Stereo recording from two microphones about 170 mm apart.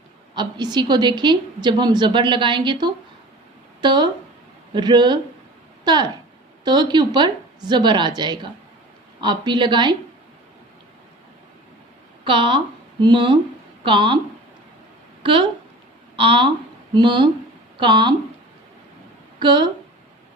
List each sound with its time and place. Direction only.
0.3 s a woman's voice: 25° right (ahead or behind)
12.2 s a woman's voice: 30° right (ahead or behind)
15.2 s a woman's voice: 30° right (ahead or behind)
19.4 s a woman's voice: 25° right (ahead or behind)